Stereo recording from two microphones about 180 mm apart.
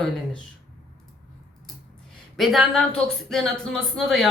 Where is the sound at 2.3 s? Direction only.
Centre (ahead or behind).